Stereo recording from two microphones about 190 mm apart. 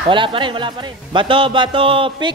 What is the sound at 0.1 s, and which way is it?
A man's voice, 25° right (ahead or behind).